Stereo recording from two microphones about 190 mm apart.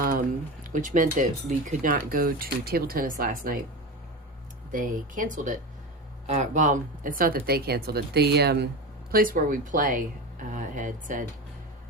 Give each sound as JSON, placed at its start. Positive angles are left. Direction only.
{"t": 0.6, "sound": "speech", "side_deg": -45}
{"t": 4.7, "sound": "speech", "side_deg": -45}